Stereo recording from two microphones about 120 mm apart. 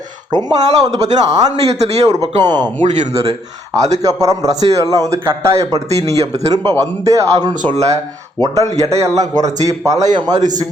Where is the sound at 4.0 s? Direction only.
30° right (ahead or behind).